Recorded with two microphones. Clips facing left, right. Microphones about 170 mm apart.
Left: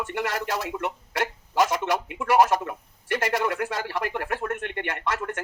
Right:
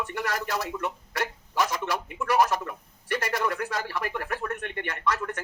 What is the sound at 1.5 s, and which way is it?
Telephone, 20° left (ahead or behind).